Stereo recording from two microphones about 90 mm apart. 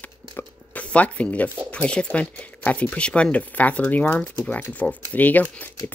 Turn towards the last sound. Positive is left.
turn(degrees=15)  # may be behind; listen again after turning